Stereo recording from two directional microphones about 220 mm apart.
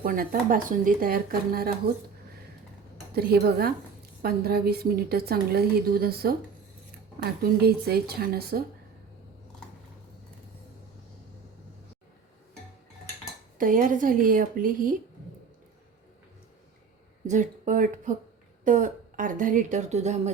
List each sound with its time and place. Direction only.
0.0 s speech: 40° right (ahead or behind)
3.1 s a woman's voice: 45° right (ahead or behind)
7.6 s a woman's voice: 45° right (ahead or behind)
13.6 s speech: 40° right (ahead or behind)
17.2 s speech: 35° right (ahead or behind)